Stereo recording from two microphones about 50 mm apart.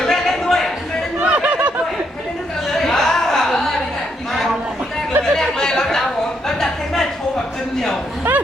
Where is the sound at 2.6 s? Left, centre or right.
Centre.